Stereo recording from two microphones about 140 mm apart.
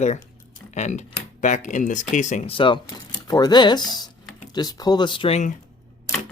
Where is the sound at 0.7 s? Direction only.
55° left (ahead or behind); by 5.4 s 35° left (ahead or behind).